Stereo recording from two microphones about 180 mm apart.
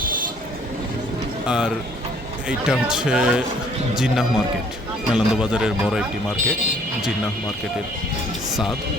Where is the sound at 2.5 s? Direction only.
5° right (ahead or behind).